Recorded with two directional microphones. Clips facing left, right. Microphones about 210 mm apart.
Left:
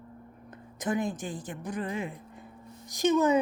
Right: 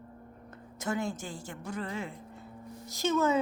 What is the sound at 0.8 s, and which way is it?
Speech, 15° left (ahead or behind).